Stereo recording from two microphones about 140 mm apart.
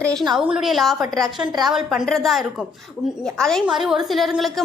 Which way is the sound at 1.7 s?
5° right (ahead or behind).